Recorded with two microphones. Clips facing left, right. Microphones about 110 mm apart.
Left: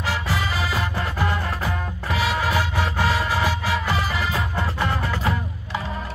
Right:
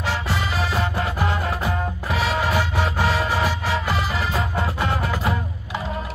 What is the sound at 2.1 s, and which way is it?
Music, centre (ahead or behind).